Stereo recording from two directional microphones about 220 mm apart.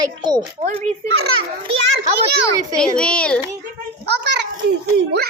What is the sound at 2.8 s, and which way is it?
Speech, 5° left (ahead or behind).